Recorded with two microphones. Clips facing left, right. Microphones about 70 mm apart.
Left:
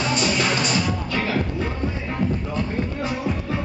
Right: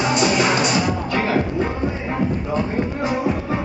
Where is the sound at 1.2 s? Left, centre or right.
Right.